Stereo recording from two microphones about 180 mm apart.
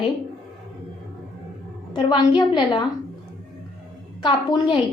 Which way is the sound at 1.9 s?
25° left (ahead or behind).